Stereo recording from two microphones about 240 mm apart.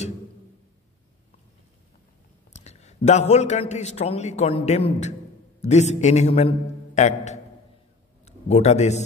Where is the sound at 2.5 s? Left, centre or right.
Left.